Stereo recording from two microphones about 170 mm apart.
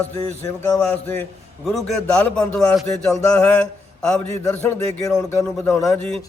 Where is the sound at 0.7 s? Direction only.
15° left (ahead or behind).